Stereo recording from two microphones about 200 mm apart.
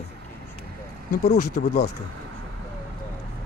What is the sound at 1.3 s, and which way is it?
Speech, 55° left (ahead or behind).